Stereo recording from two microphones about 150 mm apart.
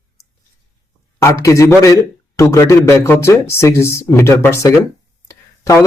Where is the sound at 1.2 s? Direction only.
20° left (ahead or behind).